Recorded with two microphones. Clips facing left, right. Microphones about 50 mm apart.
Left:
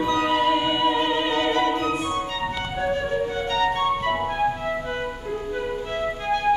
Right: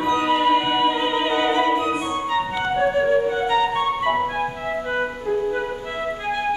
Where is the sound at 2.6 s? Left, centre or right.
Centre.